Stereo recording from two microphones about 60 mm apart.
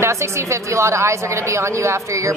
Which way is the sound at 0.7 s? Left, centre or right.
Right.